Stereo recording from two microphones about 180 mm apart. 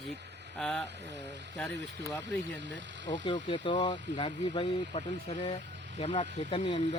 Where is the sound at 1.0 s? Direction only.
75° right (ahead or behind).